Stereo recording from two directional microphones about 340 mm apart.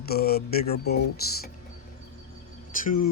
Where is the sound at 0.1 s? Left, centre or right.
Left.